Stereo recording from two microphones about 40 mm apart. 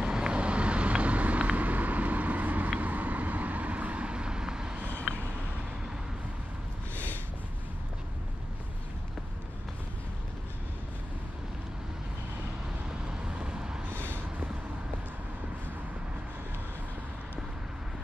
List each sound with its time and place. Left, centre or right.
0.0 s vehicle: right
12.8 s vehicle: centre
13.9 s vehicle: left